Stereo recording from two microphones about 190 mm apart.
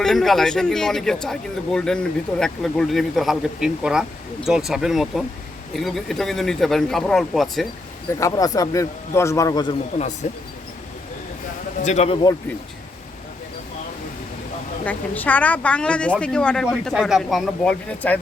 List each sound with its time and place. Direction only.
0.0 s speech: centre (ahead or behind)
8.2 s a man's voice: 20° left (ahead or behind)
10.2 s a man's voice: 40° left (ahead or behind)
11.8 s a man's voice: 35° left (ahead or behind)
14.8 s a man's voice: 10° left (ahead or behind)